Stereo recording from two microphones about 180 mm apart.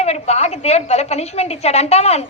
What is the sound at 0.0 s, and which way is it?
A woman's voice, 35° left (ahead or behind).